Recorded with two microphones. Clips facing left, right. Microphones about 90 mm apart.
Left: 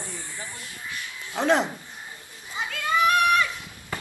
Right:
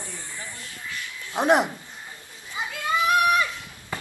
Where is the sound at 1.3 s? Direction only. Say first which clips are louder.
Right 2 dB; 20° right (ahead or behind).